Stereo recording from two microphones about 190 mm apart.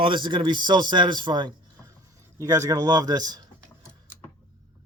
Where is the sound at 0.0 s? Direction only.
25° right (ahead or behind).